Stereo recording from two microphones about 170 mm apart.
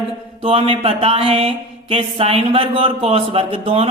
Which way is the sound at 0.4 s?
35° right (ahead or behind).